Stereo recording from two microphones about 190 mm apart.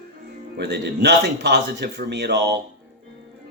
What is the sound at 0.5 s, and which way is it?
Speech, 60° right (ahead or behind).